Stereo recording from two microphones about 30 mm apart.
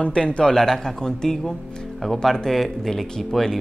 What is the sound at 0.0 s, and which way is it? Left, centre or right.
Speech, left.